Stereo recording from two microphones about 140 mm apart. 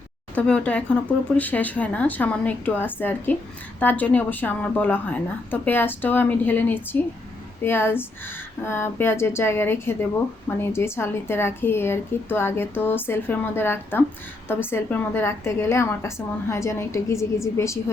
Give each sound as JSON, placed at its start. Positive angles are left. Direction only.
{"t": 0.3, "sound": "a woman's voice", "side_deg": 10}